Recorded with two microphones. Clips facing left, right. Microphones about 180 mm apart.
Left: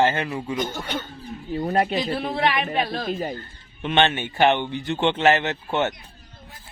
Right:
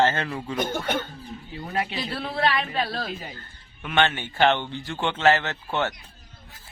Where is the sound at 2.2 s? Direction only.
15° left (ahead or behind).